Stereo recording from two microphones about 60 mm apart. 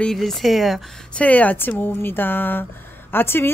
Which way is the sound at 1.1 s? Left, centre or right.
Left.